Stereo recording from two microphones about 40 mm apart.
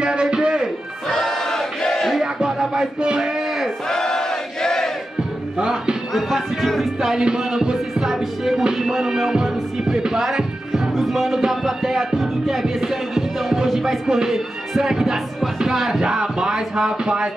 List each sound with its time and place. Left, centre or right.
0.0 s music: right
1.0 s battle cry: centre
2.1 s music: centre
3.9 s a sound: centre
5.6 s music: right
6.1 s music: centre
7.0 s music: centre